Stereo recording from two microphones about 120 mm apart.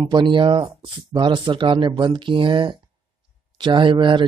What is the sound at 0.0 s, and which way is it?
Speech, 40° right (ahead or behind).